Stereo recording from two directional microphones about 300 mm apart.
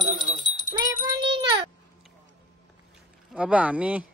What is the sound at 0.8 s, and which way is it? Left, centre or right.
Music, right.